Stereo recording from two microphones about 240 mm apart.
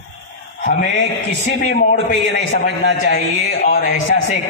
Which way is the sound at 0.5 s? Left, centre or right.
Left.